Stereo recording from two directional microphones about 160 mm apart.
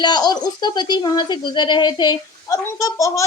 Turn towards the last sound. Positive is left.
turn(degrees=20)  # may be behind; listen again after turning